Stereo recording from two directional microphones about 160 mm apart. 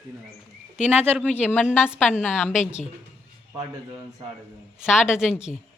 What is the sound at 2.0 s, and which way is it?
Speech, 10° left (ahead or behind).